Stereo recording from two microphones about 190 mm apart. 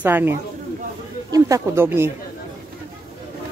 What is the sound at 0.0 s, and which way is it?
Speech, 10° right (ahead or behind).